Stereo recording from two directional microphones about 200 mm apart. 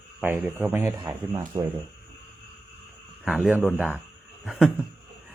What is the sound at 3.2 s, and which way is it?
A man's voice, 5° right (ahead or behind).